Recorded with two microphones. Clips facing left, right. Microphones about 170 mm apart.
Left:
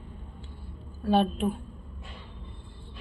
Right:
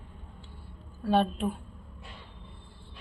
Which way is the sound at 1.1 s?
Centre (ahead or behind).